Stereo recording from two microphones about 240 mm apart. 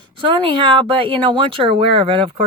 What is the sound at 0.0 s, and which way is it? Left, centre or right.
Speech, centre.